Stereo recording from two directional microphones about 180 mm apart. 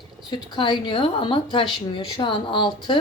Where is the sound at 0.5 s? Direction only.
25° left (ahead or behind).